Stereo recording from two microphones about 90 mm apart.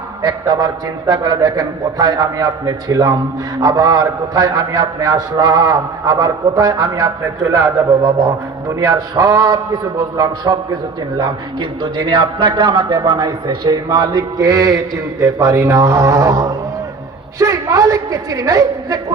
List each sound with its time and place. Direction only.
0.2 s a man's voice: 45° right (ahead or behind)
11.8 s a man's voice: 65° right (ahead or behind); by 19.1 s 45° right (ahead or behind)